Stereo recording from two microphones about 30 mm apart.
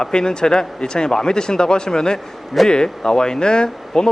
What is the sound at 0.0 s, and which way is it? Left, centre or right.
Speech, left.